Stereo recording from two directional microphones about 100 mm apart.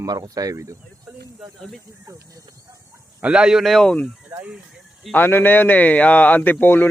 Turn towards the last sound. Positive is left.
turn(degrees=20)  # may be behind; listen again after turning